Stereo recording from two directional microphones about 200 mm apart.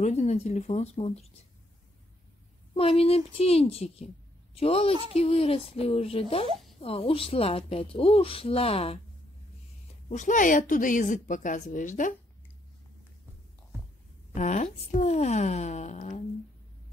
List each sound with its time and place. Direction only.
0.0 s a woman's voice: 35° left (ahead or behind)
2.7 s a woman's voice: 30° left (ahead or behind)
10.0 s a woman's voice: 35° left (ahead or behind)
14.3 s a woman's voice: 35° left (ahead or behind)